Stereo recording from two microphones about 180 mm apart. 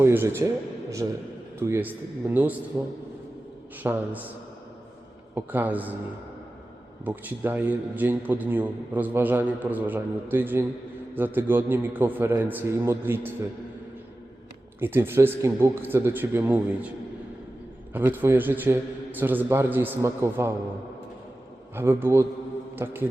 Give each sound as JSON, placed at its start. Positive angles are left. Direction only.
{"t": 0.0, "sound": "a man's voice", "side_deg": -15}
{"t": 1.5, "sound": "a man's voice", "side_deg": -15}
{"t": 3.9, "sound": "a man's voice", "side_deg": -15}
{"t": 5.3, "sound": "a man's voice", "side_deg": -10}
{"t": 7.0, "sound": "a man's voice", "side_deg": -10}
{"t": 14.8, "sound": "a man's voice", "side_deg": -10}
{"t": 17.9, "sound": "a man's voice", "side_deg": -10}
{"t": 21.8, "sound": "a man's voice", "side_deg": -15}